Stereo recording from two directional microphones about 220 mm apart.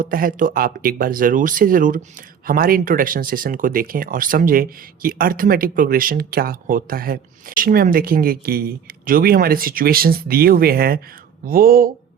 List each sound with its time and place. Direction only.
0.0 s speech: 40° right (ahead or behind)